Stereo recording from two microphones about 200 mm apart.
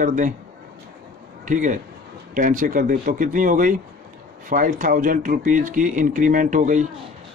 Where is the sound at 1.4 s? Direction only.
40° right (ahead or behind).